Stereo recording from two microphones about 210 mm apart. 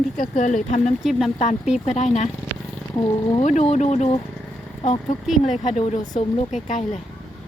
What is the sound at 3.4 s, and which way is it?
A woman's voice, 35° left (ahead or behind).